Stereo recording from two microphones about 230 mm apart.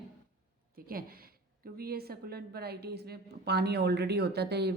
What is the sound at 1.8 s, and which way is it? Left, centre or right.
Speech, right.